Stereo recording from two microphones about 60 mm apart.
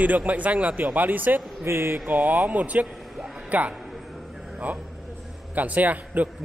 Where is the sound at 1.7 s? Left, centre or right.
Right.